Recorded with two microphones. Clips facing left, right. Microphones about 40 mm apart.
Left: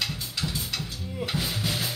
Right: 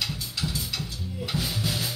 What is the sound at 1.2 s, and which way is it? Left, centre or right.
Drum, centre.